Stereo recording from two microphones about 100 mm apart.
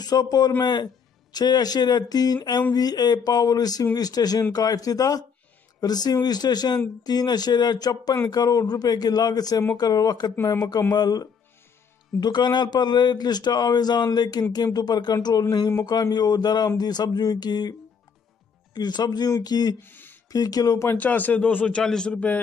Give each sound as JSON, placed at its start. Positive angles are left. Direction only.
{"t": 0.0, "sound": "speech", "side_deg": 40}
{"t": 19.8, "sound": "a sound", "side_deg": 20}
{"t": 20.2, "sound": "speech", "side_deg": 40}
{"t": 21.0, "sound": "a man's voice", "side_deg": 15}